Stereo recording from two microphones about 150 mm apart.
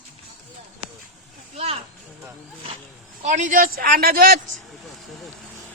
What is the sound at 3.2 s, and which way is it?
A man's voice, 55° right (ahead or behind).